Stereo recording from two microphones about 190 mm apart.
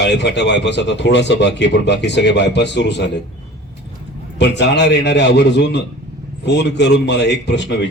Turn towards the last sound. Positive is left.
turn(degrees=65)  # may be behind; listen again after turning